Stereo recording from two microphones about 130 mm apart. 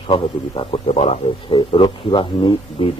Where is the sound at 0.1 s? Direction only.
45° left (ahead or behind).